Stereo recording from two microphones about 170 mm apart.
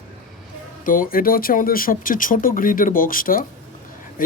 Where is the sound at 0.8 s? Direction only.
55° left (ahead or behind).